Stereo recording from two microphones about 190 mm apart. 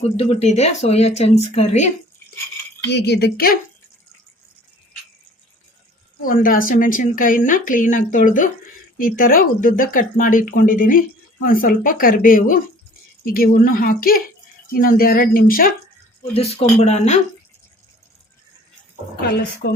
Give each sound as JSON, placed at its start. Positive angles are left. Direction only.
{"t": 0.2, "sound": "speech", "side_deg": 35}
{"t": 2.8, "sound": "speech", "side_deg": 60}
{"t": 6.2, "sound": "speech", "side_deg": 45}
{"t": 16.3, "sound": "speech", "side_deg": 30}